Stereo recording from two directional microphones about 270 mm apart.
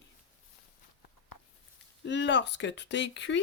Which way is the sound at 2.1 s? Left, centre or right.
Left.